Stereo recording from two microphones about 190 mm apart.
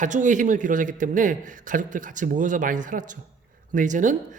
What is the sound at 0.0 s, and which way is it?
Speech, 40° right (ahead or behind).